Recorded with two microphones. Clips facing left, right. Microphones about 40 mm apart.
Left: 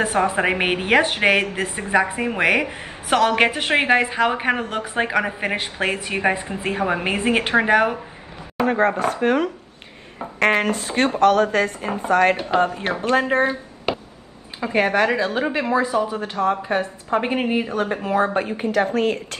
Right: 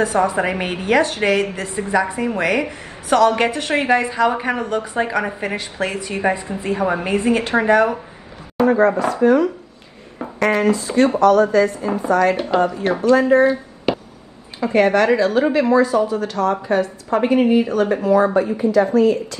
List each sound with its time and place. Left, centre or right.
0.0 s a woman's voice: left
8.6 s a woman's voice: left
14.6 s a woman's voice: centre
15.8 s a woman's voice: left